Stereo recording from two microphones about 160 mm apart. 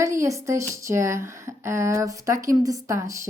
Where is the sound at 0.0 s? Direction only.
20° right (ahead or behind).